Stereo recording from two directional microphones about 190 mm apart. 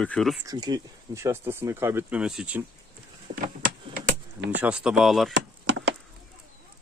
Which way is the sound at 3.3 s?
25° right (ahead or behind).